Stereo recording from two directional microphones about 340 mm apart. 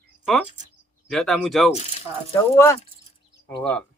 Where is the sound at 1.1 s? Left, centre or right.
Centre.